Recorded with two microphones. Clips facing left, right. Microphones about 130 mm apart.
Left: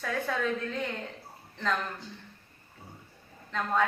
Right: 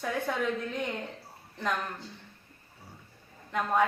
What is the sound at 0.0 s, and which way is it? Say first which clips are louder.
Speech: even; 15° right (ahead or behind).